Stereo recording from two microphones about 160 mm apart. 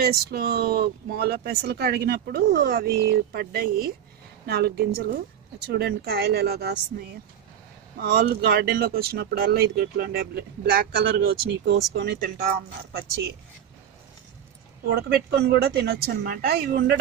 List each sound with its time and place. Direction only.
0.0 s speech: 75° right (ahead or behind)
8.0 s speech: 80° right
14.9 s speech: 85° right